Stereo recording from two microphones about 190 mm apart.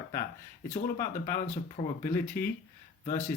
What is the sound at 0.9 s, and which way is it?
Speech, 45° left (ahead or behind).